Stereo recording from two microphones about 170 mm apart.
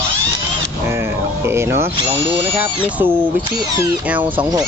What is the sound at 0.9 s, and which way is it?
Speech, 15° right (ahead or behind).